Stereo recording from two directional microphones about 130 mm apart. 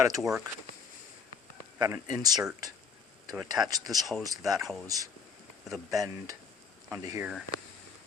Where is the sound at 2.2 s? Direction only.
30° right (ahead or behind).